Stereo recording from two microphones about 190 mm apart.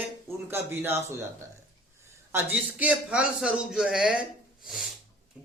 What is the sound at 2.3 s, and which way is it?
A man's voice, 10° right (ahead or behind).